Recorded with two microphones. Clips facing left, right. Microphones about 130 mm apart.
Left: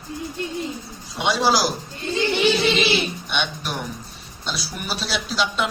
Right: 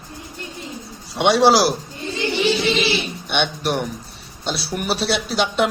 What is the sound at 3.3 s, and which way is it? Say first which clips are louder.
A man's voice: right 6 dB; 65° right (ahead or behind).